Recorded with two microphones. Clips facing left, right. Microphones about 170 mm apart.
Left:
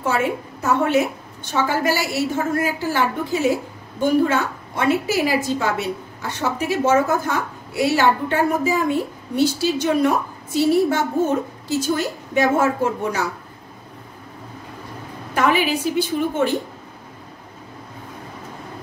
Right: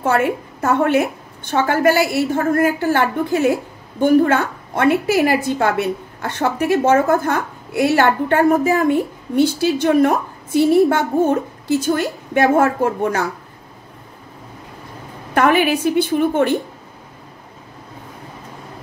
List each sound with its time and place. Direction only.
0.0 s a woman's voice: 55° right (ahead or behind)
15.3 s a woman's voice: 60° right (ahead or behind)